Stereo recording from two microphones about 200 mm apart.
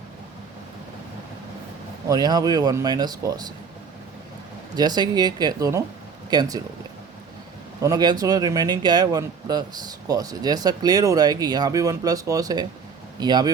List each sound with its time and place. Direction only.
2.0 s speech: 20° right (ahead or behind)
4.7 s speech: 20° right (ahead or behind)
7.8 s speech: 20° right (ahead or behind)